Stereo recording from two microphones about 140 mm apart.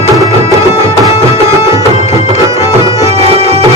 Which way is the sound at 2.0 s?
50° left (ahead or behind).